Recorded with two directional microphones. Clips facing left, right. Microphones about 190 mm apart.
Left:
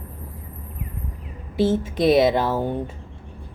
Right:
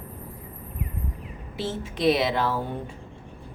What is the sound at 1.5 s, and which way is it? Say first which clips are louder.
Speech: left 10 dB; 50° left (ahead or behind).